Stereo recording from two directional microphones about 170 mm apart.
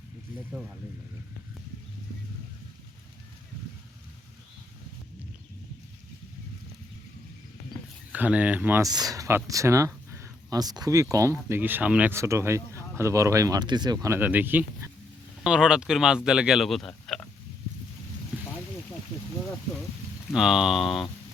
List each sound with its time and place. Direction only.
8.1 s speech: 10° right (ahead or behind)
8.9 s speech: 20° right (ahead or behind); by 17.2 s centre (ahead or behind)
18.3 s boat: 5° right (ahead or behind)
20.3 s speech: 5° right (ahead or behind)